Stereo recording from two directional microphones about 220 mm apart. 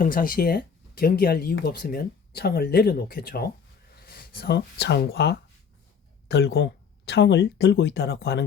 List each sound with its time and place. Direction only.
0.0 s speech: 40° left (ahead or behind)